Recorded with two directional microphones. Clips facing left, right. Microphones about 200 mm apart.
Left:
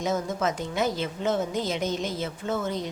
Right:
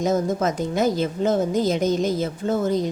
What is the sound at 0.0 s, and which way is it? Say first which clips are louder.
A woman's voice: right 6 dB; 40° right (ahead or behind).